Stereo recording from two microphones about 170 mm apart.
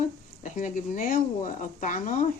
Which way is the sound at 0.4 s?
50° left (ahead or behind).